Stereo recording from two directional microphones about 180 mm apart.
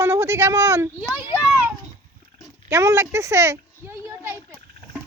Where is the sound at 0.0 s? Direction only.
15° right (ahead or behind).